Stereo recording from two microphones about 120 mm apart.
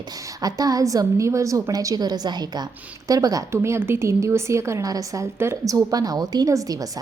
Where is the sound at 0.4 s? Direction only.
30° right (ahead or behind).